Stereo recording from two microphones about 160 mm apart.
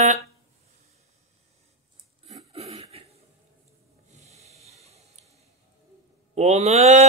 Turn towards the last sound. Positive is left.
turn(degrees=-45)  # may be behind; listen again after turning